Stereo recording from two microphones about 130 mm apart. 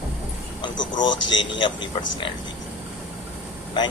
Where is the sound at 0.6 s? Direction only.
35° left (ahead or behind).